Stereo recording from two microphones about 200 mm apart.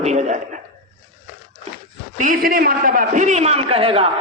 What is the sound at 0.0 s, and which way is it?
Speech, 35° right (ahead or behind).